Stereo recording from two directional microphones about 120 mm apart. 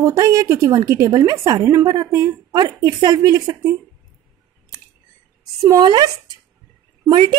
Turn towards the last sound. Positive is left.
turn(degrees=-40)  # may be behind; listen again after turning